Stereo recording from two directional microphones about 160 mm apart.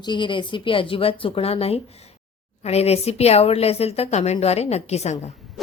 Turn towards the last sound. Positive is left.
turn(degrees=0)  # may be behind; listen again after turning